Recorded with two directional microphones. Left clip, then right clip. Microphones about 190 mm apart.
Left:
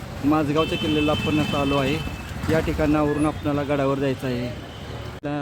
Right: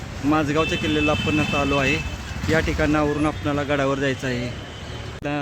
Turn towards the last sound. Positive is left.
turn(degrees=-5)  # may be behind; listen again after turning